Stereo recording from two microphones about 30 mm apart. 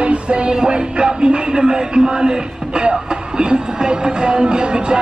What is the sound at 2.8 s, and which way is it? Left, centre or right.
Speech, right.